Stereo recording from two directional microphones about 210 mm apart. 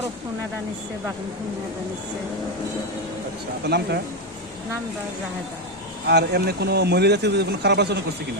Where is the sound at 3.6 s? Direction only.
50° right (ahead or behind).